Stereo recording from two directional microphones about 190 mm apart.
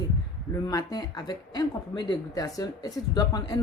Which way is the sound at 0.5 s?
20° left (ahead or behind).